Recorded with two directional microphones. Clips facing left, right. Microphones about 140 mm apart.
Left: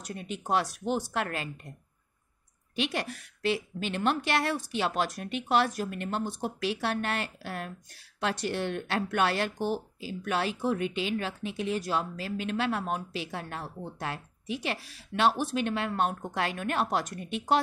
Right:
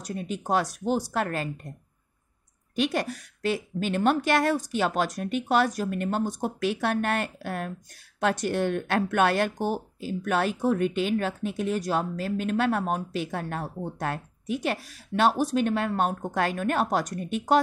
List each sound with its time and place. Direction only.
0.0 s speech: 40° right (ahead or behind)
2.7 s speech: 45° right (ahead or behind)